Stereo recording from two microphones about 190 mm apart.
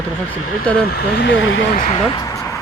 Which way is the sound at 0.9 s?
60° left (ahead or behind).